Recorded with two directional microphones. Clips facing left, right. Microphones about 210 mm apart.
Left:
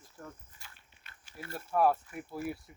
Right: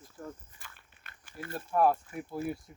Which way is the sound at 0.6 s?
50° right (ahead or behind).